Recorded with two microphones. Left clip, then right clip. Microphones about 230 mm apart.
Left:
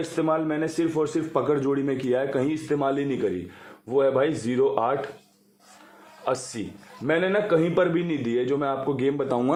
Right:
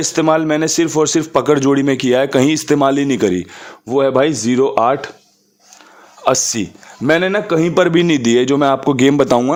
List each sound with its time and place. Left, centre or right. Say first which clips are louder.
0.2 s a man's voice: right 11 dB; right
6.2 s a man's voice: right 13 dB; right